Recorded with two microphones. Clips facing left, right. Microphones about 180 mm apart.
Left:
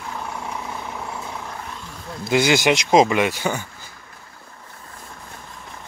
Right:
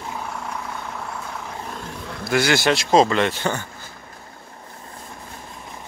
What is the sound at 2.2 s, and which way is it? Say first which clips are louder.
Speech: left 2 dB; 20° left (ahead or behind).